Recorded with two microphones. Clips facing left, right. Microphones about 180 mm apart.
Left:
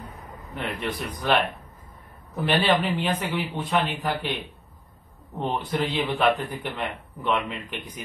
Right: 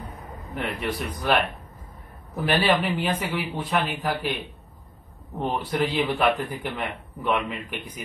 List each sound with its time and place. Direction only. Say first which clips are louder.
0.6 s a man's voice: right 1 dB; 10° right (ahead or behind)
2.4 s a man's voice: even; 10° right (ahead or behind)
5.4 s a man's voice: right 1 dB; 5° right (ahead or behind)